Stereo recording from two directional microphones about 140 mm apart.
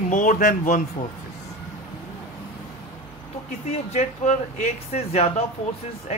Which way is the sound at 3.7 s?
55° left (ahead or behind).